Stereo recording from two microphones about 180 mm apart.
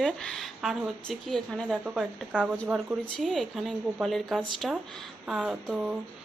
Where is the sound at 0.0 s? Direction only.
5° left (ahead or behind).